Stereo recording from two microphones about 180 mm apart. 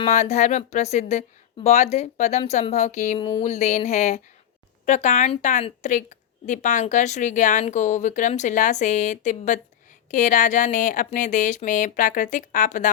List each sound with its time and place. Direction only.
0.0 s a woman's voice: 40° left (ahead or behind)